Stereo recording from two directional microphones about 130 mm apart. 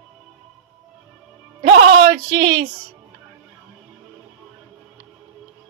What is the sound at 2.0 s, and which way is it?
Speech, 50° right (ahead or behind).